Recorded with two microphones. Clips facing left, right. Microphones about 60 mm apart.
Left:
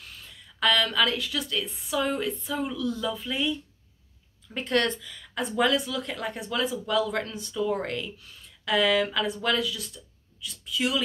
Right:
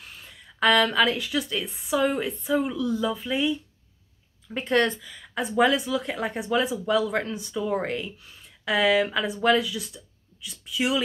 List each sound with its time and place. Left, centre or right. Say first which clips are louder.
0.0 s speech: right 1 dB; right
4.6 s a woman's voice: right 3 dB; centre